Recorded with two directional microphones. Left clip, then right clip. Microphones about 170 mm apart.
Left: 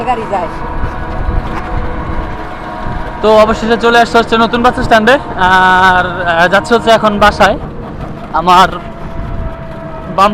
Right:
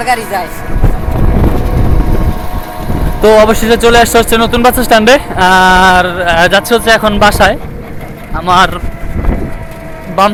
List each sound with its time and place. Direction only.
0.0 s speech: 10° right (ahead or behind)
3.2 s speech: 25° right (ahead or behind)
8.3 s a man's voice: centre (ahead or behind)
8.5 s speech: 15° right (ahead or behind)